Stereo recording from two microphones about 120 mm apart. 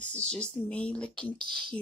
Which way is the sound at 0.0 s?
10° left (ahead or behind).